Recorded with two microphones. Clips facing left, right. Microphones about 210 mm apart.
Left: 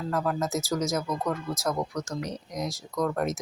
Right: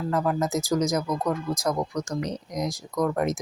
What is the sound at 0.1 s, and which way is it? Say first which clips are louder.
Speech: right 3 dB; 15° right (ahead or behind).